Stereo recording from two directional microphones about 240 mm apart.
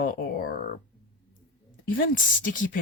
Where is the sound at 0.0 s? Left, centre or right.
Left.